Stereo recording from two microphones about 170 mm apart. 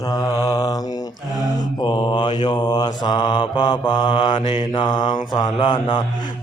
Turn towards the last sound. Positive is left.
turn(degrees=30)  # may be behind; listen again after turning